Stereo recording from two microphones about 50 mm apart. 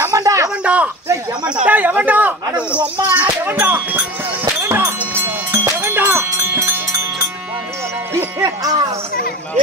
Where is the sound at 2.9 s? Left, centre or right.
Right.